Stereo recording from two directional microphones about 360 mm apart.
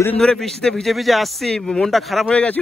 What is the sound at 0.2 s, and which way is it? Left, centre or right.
Speech, centre.